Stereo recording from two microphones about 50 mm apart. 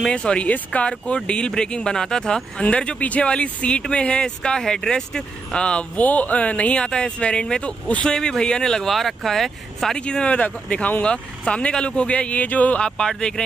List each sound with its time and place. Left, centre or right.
0.1 s speech: left
5.9 s speech: left; by 9.9 s centre
9.9 s speech: centre
12.8 s speech: centre